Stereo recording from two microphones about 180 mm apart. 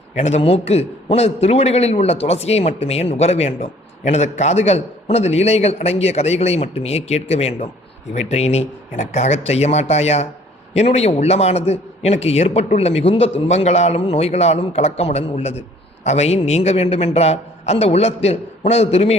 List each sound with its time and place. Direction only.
0.2 s a man's voice: 40° left (ahead or behind)